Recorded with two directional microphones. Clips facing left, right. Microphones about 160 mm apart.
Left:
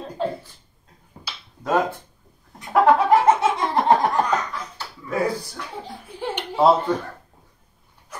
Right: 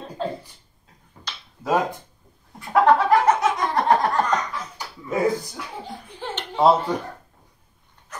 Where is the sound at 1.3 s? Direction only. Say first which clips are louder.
Even; 10° left (ahead or behind).